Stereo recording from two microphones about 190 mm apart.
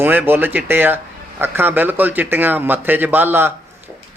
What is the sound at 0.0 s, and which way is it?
A man's voice, 10° right (ahead or behind).